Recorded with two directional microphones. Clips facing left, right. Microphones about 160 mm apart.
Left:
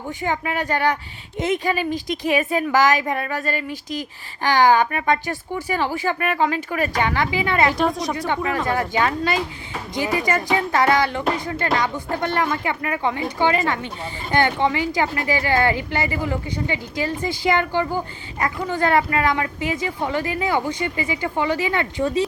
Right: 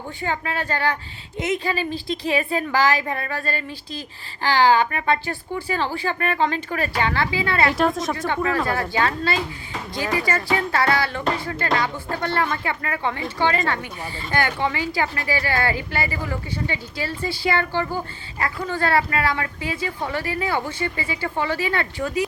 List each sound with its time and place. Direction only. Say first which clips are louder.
0.2 s a woman's voice: left 2 dB; 15° left (ahead or behind)
7.7 s speech: even; centre (ahead or behind)
8.3 s a woman's voice: even; 15° left (ahead or behind)